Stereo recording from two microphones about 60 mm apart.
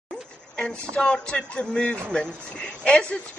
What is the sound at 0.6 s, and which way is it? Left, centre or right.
A woman's voice, centre.